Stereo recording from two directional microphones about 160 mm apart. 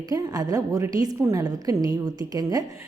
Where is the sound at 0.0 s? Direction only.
25° right (ahead or behind).